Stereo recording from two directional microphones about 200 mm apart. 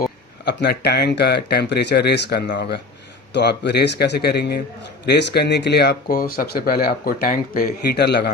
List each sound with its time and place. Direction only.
0.4 s speech: 55° left (ahead or behind)
2.5 s speech: 40° left (ahead or behind)
3.3 s speech: 60° left (ahead or behind)